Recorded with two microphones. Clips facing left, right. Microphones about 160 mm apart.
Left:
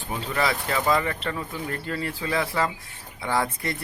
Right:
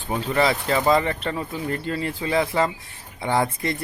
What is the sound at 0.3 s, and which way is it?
Speech, 25° right (ahead or behind).